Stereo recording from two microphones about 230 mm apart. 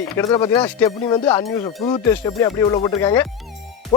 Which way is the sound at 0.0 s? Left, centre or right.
Centre.